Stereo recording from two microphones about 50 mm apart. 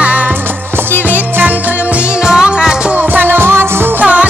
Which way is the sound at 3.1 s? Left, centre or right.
Right.